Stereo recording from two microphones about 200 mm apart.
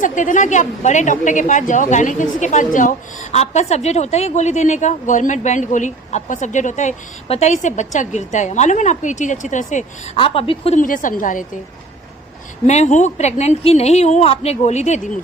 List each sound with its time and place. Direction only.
0.0 s a woman's voice: 40° left (ahead or behind)
10.2 s a woman's voice: 25° left (ahead or behind)
10.8 s a woman's voice: 40° left (ahead or behind)
12.6 s a woman's voice: 35° left (ahead or behind)